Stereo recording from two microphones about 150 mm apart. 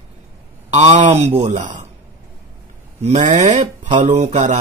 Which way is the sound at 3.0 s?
55° right (ahead or behind).